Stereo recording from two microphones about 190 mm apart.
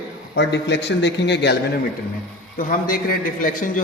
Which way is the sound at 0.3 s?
70° left (ahead or behind).